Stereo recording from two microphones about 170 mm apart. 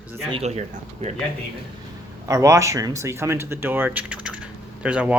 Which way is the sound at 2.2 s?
20° right (ahead or behind).